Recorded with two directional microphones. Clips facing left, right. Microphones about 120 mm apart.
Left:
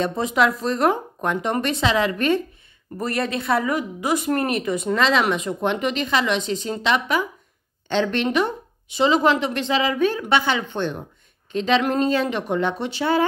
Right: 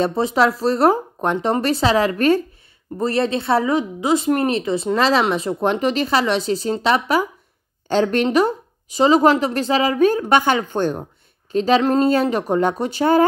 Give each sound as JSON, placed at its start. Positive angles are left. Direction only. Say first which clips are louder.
{"t": 0.0, "sound": "speech", "louder": "right 3 dB", "side_deg": -30}
{"t": 3.0, "sound": "speech", "louder": "right 5 dB", "side_deg": -30}